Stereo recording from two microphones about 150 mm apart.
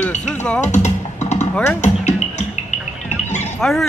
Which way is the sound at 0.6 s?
50° left (ahead or behind).